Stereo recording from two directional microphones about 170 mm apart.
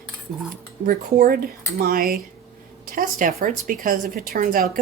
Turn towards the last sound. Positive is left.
turn(degrees=-55)  # may be behind; listen again after turning